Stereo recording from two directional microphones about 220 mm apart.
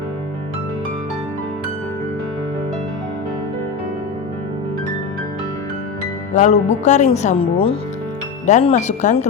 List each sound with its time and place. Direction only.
6.3 s speech: 30° left (ahead or behind)